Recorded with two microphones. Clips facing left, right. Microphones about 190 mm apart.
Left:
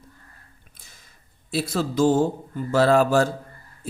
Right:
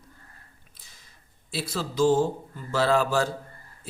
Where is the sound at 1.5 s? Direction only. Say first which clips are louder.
Left 7 dB; 50° left (ahead or behind).